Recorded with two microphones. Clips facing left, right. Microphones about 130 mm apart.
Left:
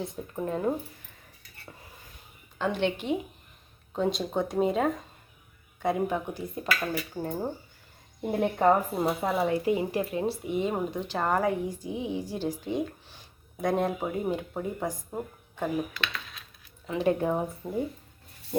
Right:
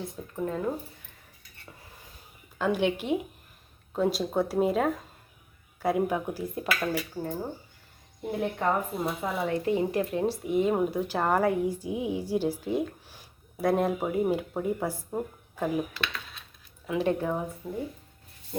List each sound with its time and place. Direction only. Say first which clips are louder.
0.3 s speech: left 1 dB; 20° left (ahead or behind)
2.6 s speech: right 2 dB; 10° right (ahead or behind)
7.1 s speech: left 1 dB; 15° left (ahead or behind)
8.5 s speech: left 7 dB; 30° left (ahead or behind)
9.6 s speech: right 1 dB; 5° left (ahead or behind)
17.2 s speech: left 2 dB; 15° left (ahead or behind)
17.6 s speech: left 3 dB; centre (ahead or behind)